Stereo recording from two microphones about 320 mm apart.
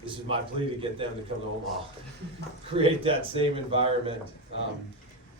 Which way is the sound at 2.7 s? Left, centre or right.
Centre.